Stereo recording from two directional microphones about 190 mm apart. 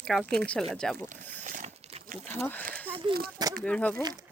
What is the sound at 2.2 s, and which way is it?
Speech, 10° left (ahead or behind).